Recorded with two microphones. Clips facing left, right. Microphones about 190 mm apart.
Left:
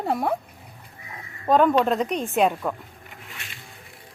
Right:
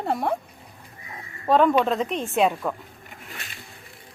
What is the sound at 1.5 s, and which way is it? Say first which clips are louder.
Speech: even; centre (ahead or behind).